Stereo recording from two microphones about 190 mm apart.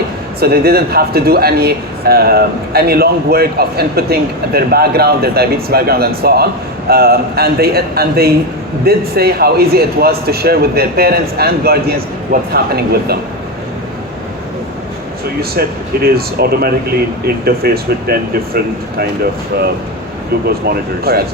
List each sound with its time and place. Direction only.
0.3 s a man's voice: 55° right (ahead or behind)
15.4 s a man's voice: 55° right (ahead or behind)